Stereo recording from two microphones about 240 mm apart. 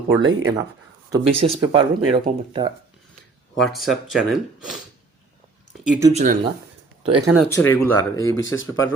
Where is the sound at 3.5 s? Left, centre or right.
Centre.